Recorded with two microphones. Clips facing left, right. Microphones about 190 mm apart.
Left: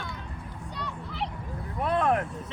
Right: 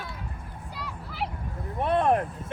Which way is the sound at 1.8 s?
25° right (ahead or behind).